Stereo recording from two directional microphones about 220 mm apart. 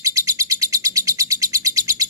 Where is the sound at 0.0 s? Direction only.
15° right (ahead or behind).